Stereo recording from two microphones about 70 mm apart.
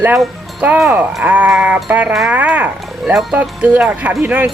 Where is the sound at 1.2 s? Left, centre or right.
Right.